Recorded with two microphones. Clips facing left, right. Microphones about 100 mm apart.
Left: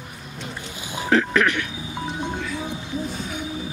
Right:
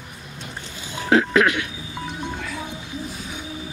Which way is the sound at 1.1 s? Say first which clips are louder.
Right 2 dB; 15° right (ahead or behind).